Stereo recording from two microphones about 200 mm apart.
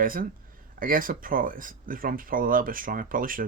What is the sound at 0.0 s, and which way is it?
Speech, 45° right (ahead or behind).